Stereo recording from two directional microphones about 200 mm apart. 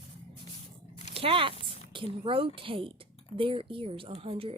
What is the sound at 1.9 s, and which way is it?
Speech, 25° right (ahead or behind).